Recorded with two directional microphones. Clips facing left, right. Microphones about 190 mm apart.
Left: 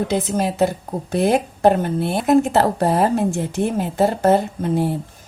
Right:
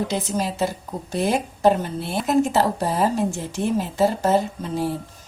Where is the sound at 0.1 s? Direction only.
60° left (ahead or behind).